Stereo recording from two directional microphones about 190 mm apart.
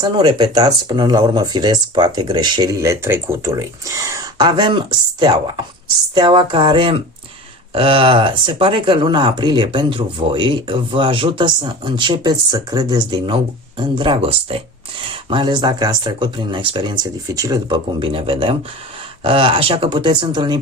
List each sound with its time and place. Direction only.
0.0 s speech: 25° right (ahead or behind)